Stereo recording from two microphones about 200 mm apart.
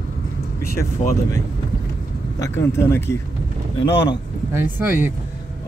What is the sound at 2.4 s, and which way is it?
Speech, 15° left (ahead or behind).